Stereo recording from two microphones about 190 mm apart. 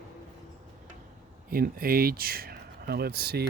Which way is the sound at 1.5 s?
50° right (ahead or behind).